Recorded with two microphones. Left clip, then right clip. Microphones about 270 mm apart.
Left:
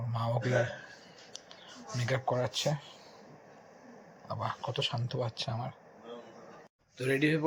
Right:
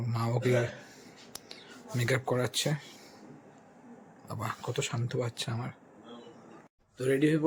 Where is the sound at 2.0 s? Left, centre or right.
Centre.